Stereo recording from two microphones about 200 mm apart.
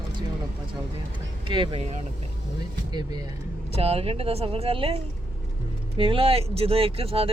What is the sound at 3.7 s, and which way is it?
Speech, 30° right (ahead or behind).